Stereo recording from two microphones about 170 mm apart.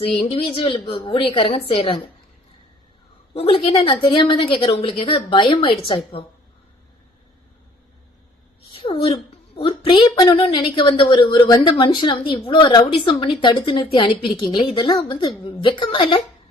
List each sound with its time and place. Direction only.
0.3 s a woman's voice: 30° left (ahead or behind)
3.3 s a woman's voice: 35° left (ahead or behind)
8.7 s a child's voice: 30° left (ahead or behind)